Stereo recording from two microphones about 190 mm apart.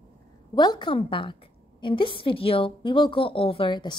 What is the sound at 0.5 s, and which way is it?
A woman's voice, 25° left (ahead or behind).